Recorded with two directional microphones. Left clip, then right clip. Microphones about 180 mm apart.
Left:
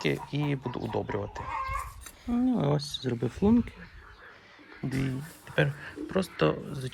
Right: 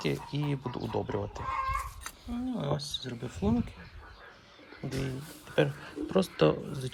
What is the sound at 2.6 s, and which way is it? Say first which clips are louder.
Speech: left 4 dB; 5° right (ahead or behind).